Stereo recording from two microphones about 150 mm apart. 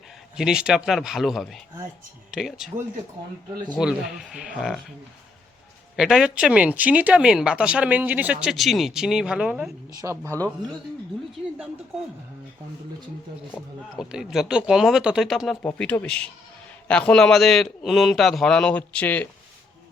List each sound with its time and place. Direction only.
0.3 s a man's voice: 5° right (ahead or behind)
3.8 s a man's voice: 5° right (ahead or behind)
6.0 s speech: 5° right (ahead or behind)
10.0 s speech: 20° right (ahead or behind)
13.9 s a man's voice: 5° right (ahead or behind)